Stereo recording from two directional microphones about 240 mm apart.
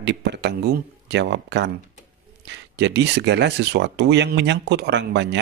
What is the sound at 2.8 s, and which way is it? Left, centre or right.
Speech, right.